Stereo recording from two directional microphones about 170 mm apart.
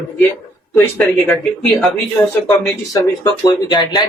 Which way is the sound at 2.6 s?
20° left (ahead or behind).